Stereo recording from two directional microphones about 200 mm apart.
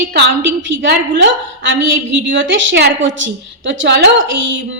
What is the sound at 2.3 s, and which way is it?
A woman's voice, 65° right (ahead or behind).